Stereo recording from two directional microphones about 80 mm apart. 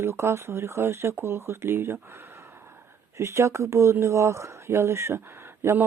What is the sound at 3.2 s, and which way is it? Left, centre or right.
Speech, right.